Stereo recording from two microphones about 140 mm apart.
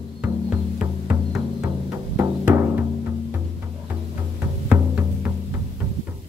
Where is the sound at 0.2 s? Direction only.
10° right (ahead or behind).